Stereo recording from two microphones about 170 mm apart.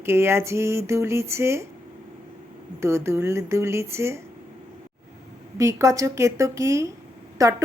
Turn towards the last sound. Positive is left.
turn(degrees=-20)  # may be behind; listen again after turning